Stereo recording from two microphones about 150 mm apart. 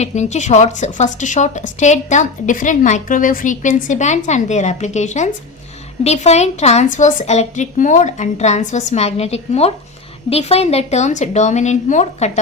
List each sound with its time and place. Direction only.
0.0 s a woman's voice: 50° left (ahead or behind)